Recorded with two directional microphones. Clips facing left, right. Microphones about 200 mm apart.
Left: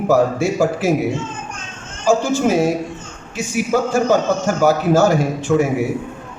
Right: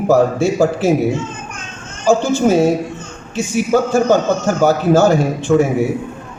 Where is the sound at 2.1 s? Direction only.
25° right (ahead or behind).